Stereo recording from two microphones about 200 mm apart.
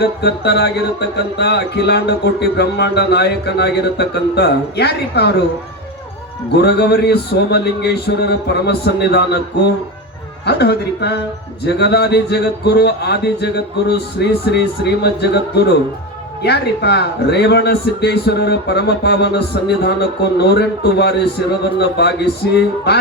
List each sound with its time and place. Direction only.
0.0 s a man's voice: 55° left (ahead or behind)
6.6 s a man's voice: 55° left (ahead or behind)
10.4 s a man's voice: 55° left (ahead or behind)